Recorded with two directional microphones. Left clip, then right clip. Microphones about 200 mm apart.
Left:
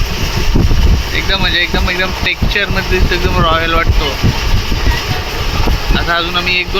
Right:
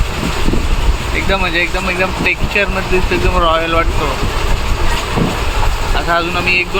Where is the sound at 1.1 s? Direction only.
10° right (ahead or behind).